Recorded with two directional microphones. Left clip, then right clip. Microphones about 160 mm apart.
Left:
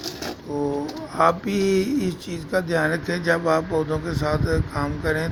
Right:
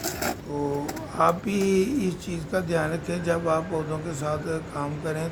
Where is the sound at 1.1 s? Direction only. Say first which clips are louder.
Left 3 dB; 25° left (ahead or behind).